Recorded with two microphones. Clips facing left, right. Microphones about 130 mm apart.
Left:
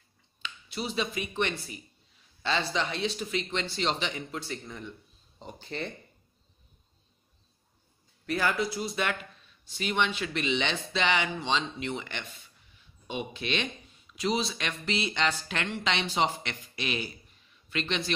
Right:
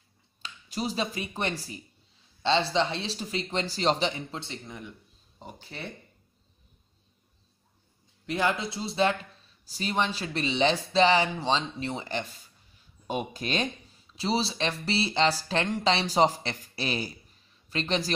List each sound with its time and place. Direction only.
0.4 s speech: 40° right (ahead or behind); by 5.9 s 5° right (ahead or behind)
8.3 s speech: 25° right (ahead or behind)